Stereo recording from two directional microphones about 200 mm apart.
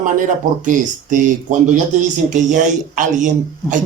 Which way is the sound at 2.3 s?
40° right (ahead or behind).